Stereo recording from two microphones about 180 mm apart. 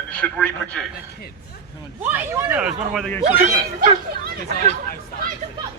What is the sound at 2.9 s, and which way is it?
Speech, centre (ahead or behind).